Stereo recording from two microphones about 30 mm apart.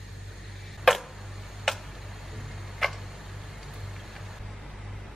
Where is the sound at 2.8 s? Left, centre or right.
Centre.